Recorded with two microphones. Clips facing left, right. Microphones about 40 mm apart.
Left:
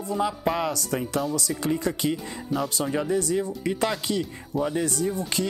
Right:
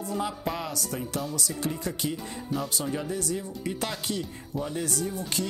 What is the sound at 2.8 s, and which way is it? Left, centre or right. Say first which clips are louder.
Speech: left 6 dB; left.